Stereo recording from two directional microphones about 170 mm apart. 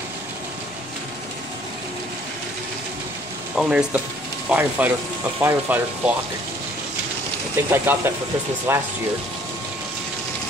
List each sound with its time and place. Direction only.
3.5 s speech: 5° right (ahead or behind)
7.7 s speech: 15° right (ahead or behind)